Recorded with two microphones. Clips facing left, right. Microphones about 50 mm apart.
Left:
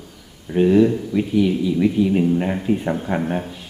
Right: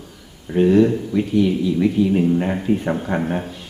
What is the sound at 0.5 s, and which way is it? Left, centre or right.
Speech, centre.